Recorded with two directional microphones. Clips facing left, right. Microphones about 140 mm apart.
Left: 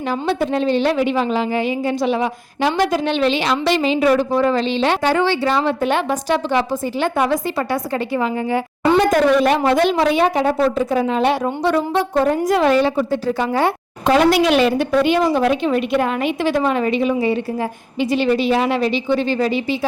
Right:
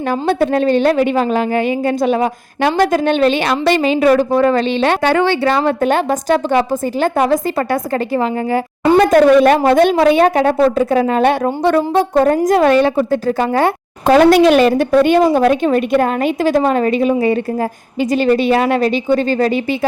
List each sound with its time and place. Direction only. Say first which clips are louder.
0.1 s a woman's voice: right 5 dB; 55° right (ahead or behind)
9.1 s a woman's voice: right 6 dB; 60° right (ahead or behind)